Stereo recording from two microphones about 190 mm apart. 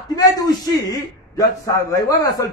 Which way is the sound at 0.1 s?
20° left (ahead or behind).